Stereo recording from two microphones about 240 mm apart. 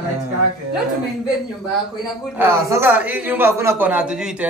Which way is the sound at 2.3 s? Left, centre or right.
Centre.